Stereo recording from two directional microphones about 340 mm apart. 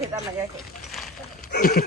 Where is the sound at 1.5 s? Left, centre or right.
Left.